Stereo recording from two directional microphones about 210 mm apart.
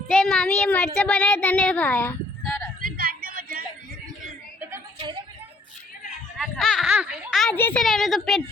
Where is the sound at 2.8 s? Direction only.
45° right (ahead or behind).